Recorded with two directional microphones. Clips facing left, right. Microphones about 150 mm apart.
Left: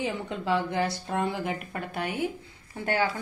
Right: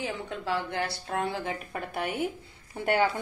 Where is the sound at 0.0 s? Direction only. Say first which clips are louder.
Left 3 dB; 25° left (ahead or behind).